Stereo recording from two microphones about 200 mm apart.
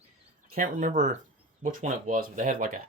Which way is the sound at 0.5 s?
40° right (ahead or behind).